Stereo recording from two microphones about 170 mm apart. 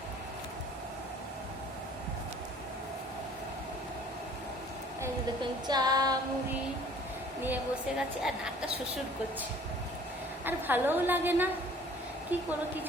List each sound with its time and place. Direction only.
5.4 s female singing: 25° right (ahead or behind)
7.4 s a woman's voice: 5° right (ahead or behind)
10.4 s a woman's voice: 10° right (ahead or behind)